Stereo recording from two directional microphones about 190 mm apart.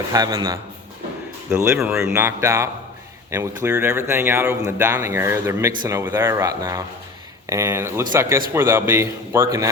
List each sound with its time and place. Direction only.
0.1 s speech: 20° right (ahead or behind)